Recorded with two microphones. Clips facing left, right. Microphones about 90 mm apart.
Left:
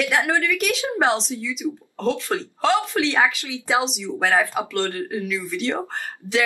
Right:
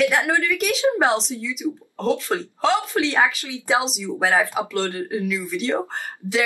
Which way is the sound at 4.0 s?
15° right (ahead or behind).